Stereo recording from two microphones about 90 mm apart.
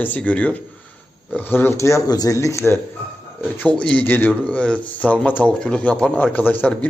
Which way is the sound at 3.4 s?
20° left (ahead or behind).